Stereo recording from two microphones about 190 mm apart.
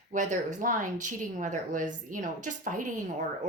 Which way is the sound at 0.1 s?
40° right (ahead or behind).